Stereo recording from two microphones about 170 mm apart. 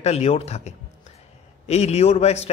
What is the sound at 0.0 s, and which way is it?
A man's voice, 40° left (ahead or behind).